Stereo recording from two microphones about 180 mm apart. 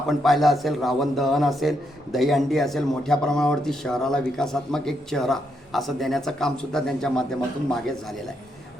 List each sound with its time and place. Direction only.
0.1 s speech: centre (ahead or behind)